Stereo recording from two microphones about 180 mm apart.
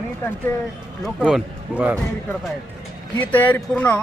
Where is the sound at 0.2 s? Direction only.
15° left (ahead or behind).